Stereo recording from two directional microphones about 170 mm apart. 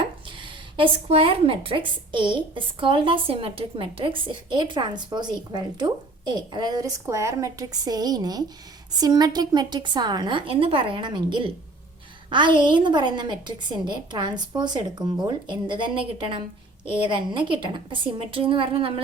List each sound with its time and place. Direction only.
0.8 s a woman's voice: 30° right (ahead or behind)